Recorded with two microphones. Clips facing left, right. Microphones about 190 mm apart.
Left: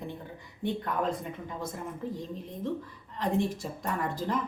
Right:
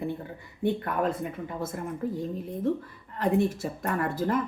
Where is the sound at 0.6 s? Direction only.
55° right (ahead or behind).